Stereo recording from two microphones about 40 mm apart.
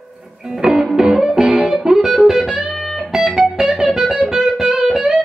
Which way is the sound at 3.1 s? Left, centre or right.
Centre.